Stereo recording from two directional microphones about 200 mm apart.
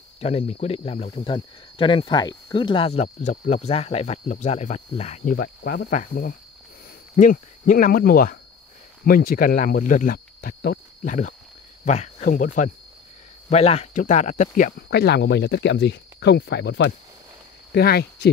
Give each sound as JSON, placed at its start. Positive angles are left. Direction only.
{"t": 0.2, "sound": "speech", "side_deg": 30}
{"t": 14.8, "sound": "speech", "side_deg": 55}